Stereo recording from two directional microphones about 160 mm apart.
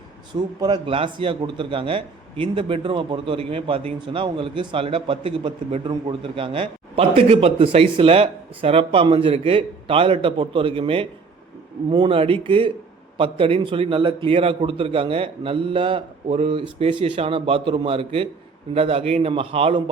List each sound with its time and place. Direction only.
0.6 s a man's voice: 30° right (ahead or behind)